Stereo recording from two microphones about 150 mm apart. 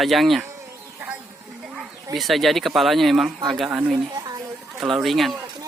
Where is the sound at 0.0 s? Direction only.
Centre (ahead or behind).